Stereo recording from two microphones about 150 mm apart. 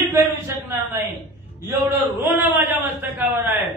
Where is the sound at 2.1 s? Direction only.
15° right (ahead or behind).